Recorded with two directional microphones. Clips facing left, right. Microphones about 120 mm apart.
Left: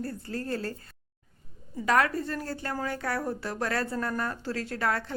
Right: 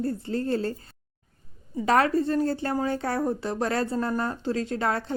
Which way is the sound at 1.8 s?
30° right (ahead or behind).